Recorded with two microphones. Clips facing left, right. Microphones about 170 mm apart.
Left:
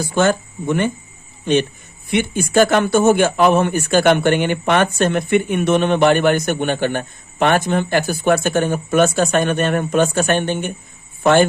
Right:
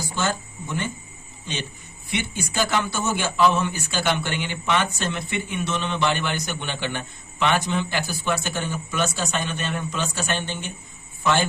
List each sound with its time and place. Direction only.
0.0 s speech: 60° left (ahead or behind)